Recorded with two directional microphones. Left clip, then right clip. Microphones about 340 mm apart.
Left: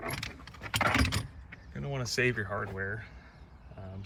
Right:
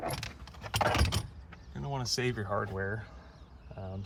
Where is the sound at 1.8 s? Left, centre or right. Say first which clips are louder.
Left 3 dB; centre.